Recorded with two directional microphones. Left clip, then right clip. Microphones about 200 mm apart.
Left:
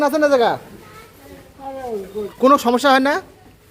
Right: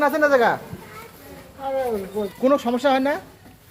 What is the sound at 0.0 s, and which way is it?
Child singing, 25° left (ahead or behind).